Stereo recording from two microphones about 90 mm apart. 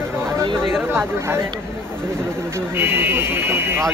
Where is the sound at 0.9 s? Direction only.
30° right (ahead or behind).